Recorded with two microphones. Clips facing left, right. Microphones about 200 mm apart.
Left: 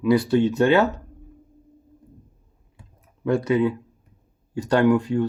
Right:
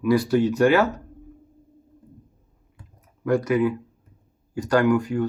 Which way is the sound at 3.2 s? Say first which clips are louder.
Even; 25° left (ahead or behind).